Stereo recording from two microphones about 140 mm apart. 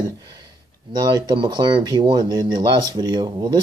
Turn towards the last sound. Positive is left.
turn(degrees=-30)  # may be behind; listen again after turning